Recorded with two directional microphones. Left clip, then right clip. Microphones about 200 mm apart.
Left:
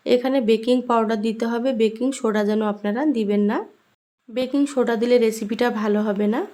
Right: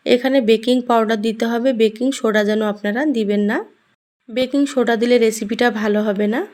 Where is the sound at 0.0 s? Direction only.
15° right (ahead or behind).